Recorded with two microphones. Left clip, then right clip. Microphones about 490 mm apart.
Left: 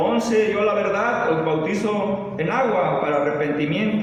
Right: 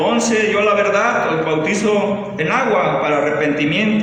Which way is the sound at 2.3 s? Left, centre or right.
Centre.